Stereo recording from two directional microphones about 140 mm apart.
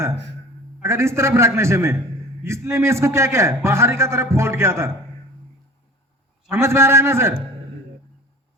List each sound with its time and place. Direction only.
0.8 s a man's voice: 20° right (ahead or behind)
6.5 s a man's voice: 20° right (ahead or behind)